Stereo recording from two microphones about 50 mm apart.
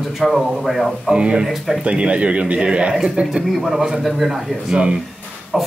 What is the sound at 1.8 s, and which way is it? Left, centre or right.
Speech, right.